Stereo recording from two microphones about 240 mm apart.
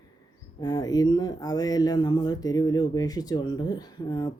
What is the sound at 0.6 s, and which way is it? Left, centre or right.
Speech, centre.